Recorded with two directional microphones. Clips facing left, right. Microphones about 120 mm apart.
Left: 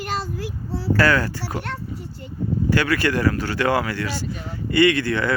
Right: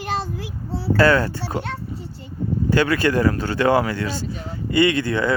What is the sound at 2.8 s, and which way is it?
Speech, 20° right (ahead or behind).